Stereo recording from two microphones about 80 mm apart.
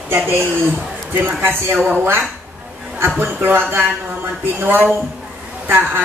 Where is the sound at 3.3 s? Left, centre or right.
Right.